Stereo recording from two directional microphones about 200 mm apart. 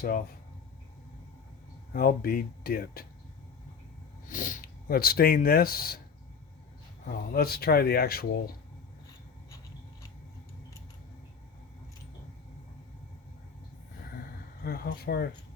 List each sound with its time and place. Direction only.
0.0 s speech: 45° left (ahead or behind)
1.9 s speech: 50° left (ahead or behind)
4.3 s speech: 40° left (ahead or behind)
7.1 s speech: 50° left (ahead or behind)
14.6 s speech: 50° left (ahead or behind)